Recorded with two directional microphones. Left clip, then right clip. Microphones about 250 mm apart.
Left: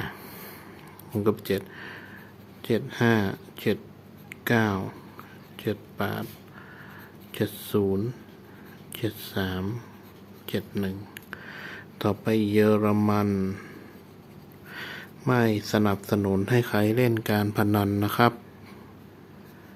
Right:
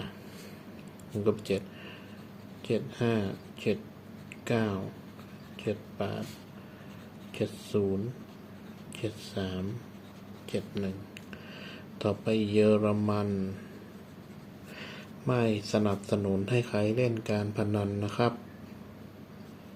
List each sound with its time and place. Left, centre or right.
1.2 s speech: left
7.3 s speech: left
8.9 s speech: left
10.8 s speech: left
14.7 s speech: left